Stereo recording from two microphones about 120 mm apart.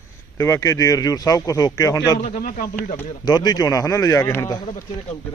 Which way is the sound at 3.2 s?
35° left (ahead or behind).